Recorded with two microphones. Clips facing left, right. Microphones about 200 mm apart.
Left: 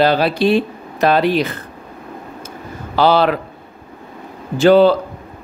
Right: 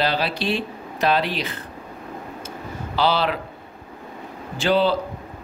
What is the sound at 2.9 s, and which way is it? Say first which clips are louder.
Speech: left 7 dB; 50° left (ahead or behind).